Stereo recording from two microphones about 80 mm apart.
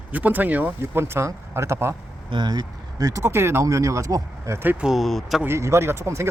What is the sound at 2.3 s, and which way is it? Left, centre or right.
Speech, right.